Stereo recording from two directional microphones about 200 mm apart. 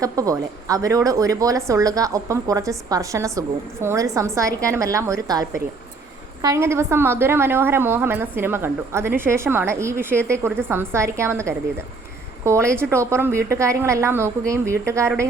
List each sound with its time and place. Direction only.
0.0 s a woman's voice: 15° right (ahead or behind)